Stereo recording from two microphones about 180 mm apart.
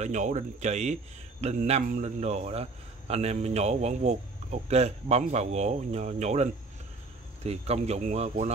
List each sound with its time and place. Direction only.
0.0 s a man's voice: 40° right (ahead or behind)